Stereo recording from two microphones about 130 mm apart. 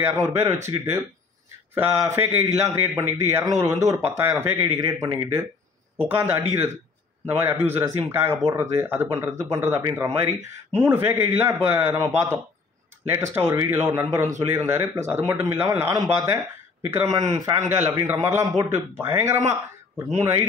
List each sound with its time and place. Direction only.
0.0 s a man's voice: 20° right (ahead or behind)